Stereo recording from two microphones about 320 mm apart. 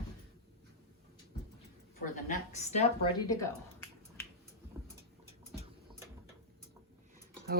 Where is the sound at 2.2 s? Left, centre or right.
Left.